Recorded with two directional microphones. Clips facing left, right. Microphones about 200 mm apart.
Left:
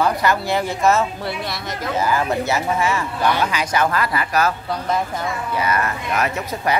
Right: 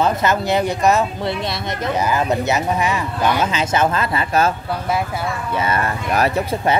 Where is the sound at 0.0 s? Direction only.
20° right (ahead or behind).